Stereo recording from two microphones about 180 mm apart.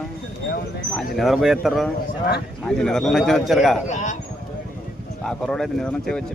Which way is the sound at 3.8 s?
45° left (ahead or behind).